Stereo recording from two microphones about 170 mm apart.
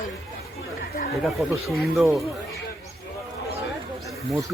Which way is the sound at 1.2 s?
Centre (ahead or behind).